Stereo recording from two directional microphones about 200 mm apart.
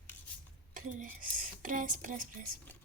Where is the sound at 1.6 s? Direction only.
40° right (ahead or behind).